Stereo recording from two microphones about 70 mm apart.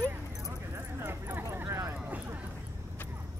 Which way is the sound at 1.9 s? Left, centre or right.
Right.